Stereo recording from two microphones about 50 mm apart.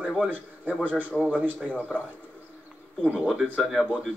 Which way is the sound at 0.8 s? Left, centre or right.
Right.